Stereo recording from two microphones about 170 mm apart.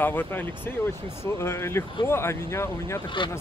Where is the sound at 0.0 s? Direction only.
10° left (ahead or behind).